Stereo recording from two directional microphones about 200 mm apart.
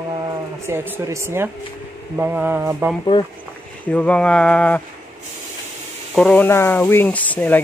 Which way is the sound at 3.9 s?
5° left (ahead or behind).